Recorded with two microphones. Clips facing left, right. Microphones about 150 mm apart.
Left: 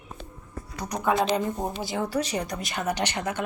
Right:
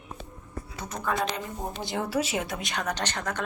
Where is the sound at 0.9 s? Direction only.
20° left (ahead or behind).